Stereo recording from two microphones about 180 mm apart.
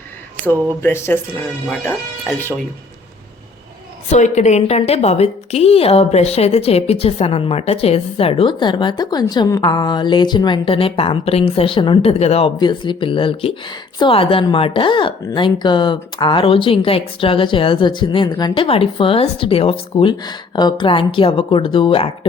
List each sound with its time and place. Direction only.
0.8 s speech: 15° left (ahead or behind)
4.1 s a woman's voice: 40° left (ahead or behind)